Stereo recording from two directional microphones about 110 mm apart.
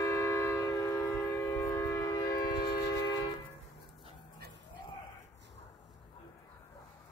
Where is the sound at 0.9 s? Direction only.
20° left (ahead or behind); by 2.8 s 40° left (ahead or behind).